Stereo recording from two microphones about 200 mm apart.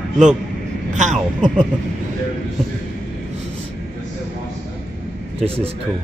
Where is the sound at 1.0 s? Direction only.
35° right (ahead or behind).